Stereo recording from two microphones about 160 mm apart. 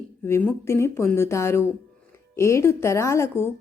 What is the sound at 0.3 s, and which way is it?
Speech, 15° left (ahead or behind).